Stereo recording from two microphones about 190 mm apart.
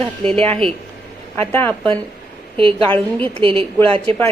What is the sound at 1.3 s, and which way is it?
Speech, 10° left (ahead or behind).